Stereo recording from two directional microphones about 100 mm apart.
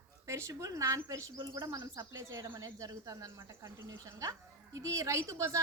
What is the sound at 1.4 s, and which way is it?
Speech, 45° right (ahead or behind).